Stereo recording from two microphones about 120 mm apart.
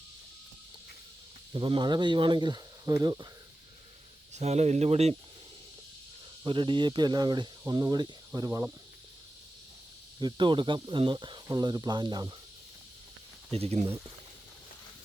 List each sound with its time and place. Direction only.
1.5 s speech: 45° right (ahead or behind)
4.4 s speech: 65° right (ahead or behind)
6.4 s speech: 45° right (ahead or behind)
8.4 s speech: 20° right (ahead or behind)
10.2 s speech: 40° right (ahead or behind)
13.5 s speech: 60° right (ahead or behind)